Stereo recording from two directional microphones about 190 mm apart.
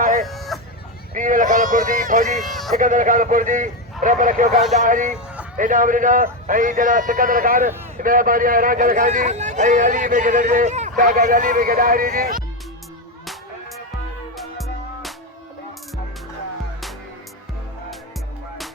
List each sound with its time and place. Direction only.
0.3 s a sound: centre (ahead or behind)
1.1 s a man's voice: 45° right (ahead or behind)
2.4 s speech: centre (ahead or behind)
2.7 s a man's voice: 45° right (ahead or behind)
14.3 s music: centre (ahead or behind)